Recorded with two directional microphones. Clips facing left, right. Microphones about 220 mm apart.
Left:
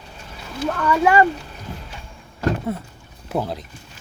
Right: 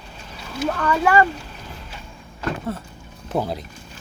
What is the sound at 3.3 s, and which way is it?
Speech, centre (ahead or behind).